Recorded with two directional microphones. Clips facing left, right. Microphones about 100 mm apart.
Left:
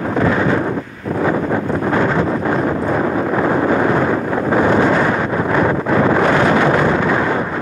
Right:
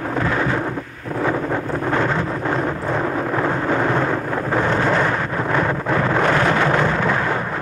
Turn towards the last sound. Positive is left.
turn(degrees=5)  # may be behind; listen again after turning